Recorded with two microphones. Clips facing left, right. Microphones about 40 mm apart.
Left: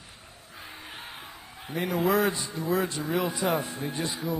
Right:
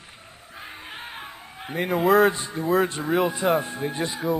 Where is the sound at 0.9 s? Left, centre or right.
Right.